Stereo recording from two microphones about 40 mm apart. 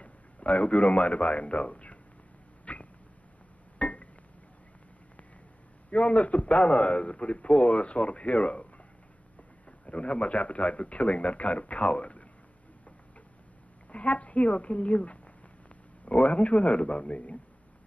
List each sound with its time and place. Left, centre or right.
0.0 s a man's voice: left
2.6 s a sound: left
5.9 s a man's voice: left
9.7 s a man's voice: left
13.9 s a man's voice: left